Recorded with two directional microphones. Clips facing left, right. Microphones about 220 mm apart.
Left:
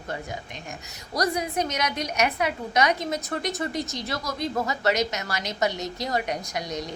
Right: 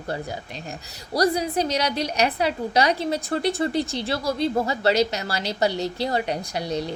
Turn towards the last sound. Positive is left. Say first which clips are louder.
# right 4 dB
turn(degrees=-30)  # may be behind; listen again after turning